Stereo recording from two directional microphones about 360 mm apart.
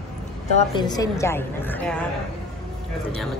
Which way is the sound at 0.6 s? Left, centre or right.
Centre.